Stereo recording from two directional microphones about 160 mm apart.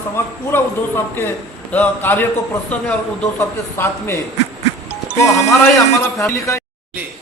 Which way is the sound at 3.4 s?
15° left (ahead or behind).